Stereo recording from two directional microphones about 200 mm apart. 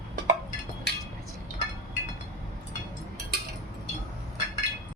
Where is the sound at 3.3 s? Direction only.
55° right (ahead or behind).